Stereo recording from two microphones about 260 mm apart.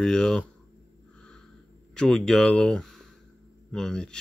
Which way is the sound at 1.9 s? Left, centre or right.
Centre.